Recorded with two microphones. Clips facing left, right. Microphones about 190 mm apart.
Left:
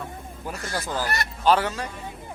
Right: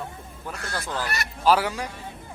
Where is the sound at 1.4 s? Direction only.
5° right (ahead or behind).